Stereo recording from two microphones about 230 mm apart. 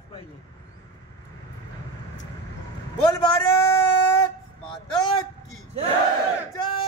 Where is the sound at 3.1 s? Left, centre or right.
Centre.